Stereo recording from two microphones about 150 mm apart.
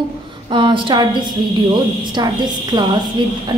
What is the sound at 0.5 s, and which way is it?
A woman's voice, 35° right (ahead or behind).